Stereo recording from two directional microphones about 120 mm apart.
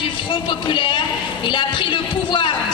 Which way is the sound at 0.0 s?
45° left (ahead or behind).